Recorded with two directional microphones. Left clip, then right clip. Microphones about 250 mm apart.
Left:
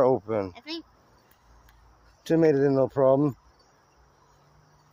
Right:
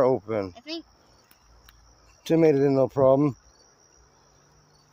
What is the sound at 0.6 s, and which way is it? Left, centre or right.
Speech, left.